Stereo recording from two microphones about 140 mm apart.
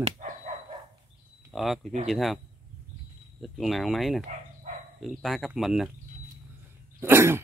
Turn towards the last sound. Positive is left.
turn(degrees=-15)  # may be behind; listen again after turning